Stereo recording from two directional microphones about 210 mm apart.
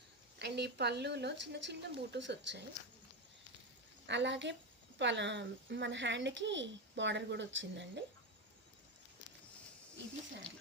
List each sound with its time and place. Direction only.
0.3 s speech: 55° right (ahead or behind)
4.0 s a child's voice: 55° right (ahead or behind)